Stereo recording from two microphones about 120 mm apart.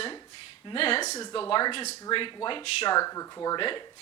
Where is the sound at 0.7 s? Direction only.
50° left (ahead or behind).